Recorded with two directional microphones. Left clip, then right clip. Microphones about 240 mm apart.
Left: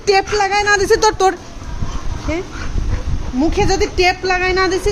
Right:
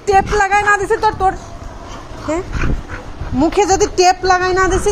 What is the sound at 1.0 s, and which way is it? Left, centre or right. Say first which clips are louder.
Speech: left 1 dB; left.